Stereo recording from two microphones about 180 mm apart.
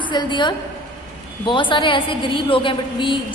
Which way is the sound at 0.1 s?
25° left (ahead or behind).